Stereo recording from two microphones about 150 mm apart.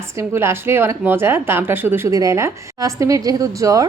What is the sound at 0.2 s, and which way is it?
A woman's voice, 15° right (ahead or behind).